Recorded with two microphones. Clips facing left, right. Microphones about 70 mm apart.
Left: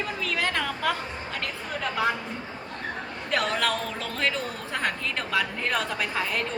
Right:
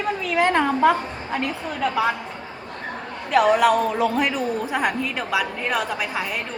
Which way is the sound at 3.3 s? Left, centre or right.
Centre.